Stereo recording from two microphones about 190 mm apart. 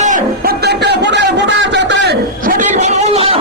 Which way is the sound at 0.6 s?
60° right (ahead or behind).